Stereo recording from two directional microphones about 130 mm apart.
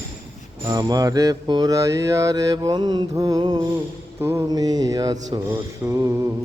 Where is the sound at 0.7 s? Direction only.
30° right (ahead or behind).